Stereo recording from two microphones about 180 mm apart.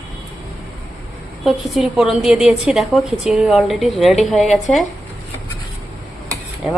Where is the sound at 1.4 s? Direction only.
Centre (ahead or behind).